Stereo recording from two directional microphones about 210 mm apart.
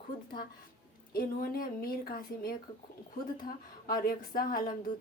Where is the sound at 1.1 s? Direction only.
45° left (ahead or behind).